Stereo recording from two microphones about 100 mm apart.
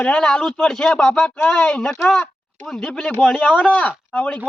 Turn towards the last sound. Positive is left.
turn(degrees=15)  # may be behind; listen again after turning